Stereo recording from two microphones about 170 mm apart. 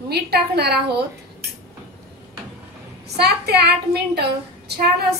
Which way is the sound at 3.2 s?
70° right (ahead or behind).